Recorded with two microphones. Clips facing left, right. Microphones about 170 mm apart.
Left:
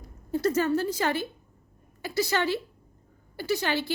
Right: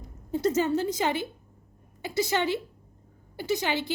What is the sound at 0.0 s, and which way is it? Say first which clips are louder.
A woman's voice: even; 20° right (ahead or behind).